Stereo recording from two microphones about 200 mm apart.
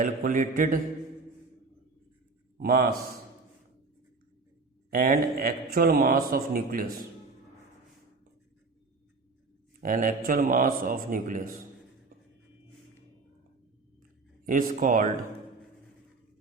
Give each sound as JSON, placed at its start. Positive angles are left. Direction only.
{"t": 0.0, "sound": "mantra", "side_deg": -40}
{"t": 2.6, "sound": "a man's voice", "side_deg": -50}
{"t": 4.9, "sound": "a man's voice", "side_deg": -45}
{"t": 9.8, "sound": "a man's voice", "side_deg": -40}
{"t": 14.4, "sound": "a man's voice", "side_deg": -40}